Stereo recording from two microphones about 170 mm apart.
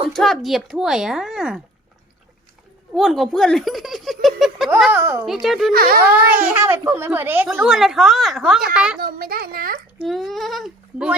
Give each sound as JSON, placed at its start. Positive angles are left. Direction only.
{"t": 0.1, "sound": "speech", "side_deg": 0}
{"t": 2.9, "sound": "speech", "side_deg": 0}
{"t": 5.7, "sound": "a child's voice", "side_deg": -60}
{"t": 6.1, "sound": "a child's voice", "side_deg": -10}
{"t": 9.0, "sound": "a child's voice", "side_deg": -60}
{"t": 10.0, "sound": "speech", "side_deg": 0}